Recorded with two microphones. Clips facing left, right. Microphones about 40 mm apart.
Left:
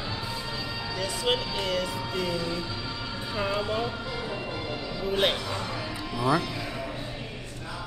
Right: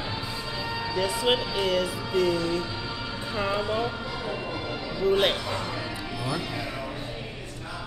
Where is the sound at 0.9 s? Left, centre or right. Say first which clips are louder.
Right 3 dB; centre.